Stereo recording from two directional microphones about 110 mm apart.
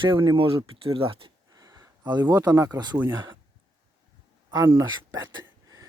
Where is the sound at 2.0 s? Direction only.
40° right (ahead or behind).